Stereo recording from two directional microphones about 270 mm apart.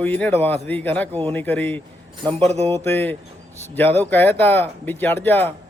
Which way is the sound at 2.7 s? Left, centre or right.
Centre.